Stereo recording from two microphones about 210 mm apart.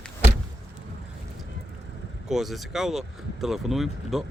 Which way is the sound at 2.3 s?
Centre (ahead or behind).